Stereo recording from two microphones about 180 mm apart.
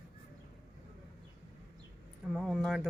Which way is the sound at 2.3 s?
Centre (ahead or behind).